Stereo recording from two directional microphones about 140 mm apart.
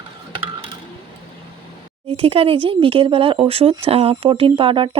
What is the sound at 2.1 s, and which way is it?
Speech, 45° right (ahead or behind).